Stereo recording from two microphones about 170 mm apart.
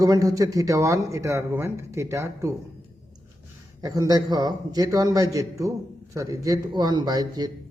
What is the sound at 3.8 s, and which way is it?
Speech, 20° right (ahead or behind).